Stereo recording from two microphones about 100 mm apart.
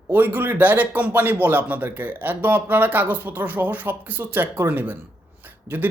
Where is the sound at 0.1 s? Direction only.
20° right (ahead or behind).